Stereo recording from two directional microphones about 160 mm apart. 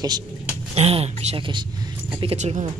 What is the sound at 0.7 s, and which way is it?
Speech, 40° right (ahead or behind).